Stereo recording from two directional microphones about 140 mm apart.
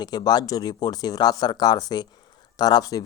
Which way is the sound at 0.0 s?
30° left (ahead or behind).